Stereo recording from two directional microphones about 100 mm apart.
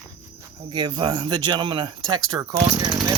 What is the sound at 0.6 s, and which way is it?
Speech, 50° right (ahead or behind).